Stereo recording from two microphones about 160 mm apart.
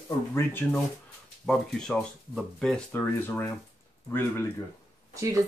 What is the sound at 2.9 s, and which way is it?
Speech, 15° left (ahead or behind).